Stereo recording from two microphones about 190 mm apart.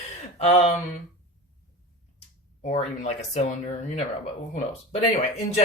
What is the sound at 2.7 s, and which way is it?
Speech, 35° left (ahead or behind).